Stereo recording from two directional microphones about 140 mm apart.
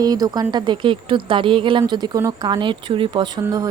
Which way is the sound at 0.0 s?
30° right (ahead or behind).